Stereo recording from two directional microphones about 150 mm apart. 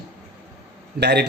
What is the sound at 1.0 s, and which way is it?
Speech, 90° right.